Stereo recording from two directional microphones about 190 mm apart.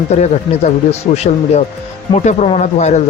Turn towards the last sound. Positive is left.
turn(degrees=40)  # may be behind; listen again after turning